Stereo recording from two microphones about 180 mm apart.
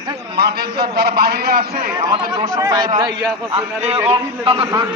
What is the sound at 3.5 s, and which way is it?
A man's voice, 35° right (ahead or behind).